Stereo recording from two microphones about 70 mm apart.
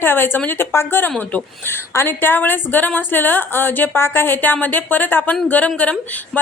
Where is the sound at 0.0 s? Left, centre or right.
Left.